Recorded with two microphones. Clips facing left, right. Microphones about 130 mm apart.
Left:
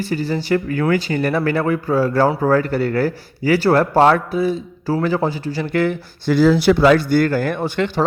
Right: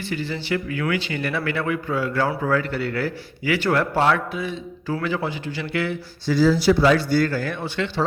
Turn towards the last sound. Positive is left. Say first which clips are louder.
# left 6 dB
turn(degrees=50)  # may be behind; listen again after turning